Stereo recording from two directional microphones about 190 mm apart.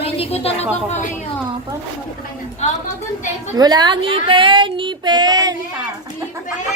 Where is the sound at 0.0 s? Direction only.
30° left (ahead or behind).